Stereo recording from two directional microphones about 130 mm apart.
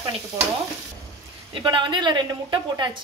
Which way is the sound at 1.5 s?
40° right (ahead or behind).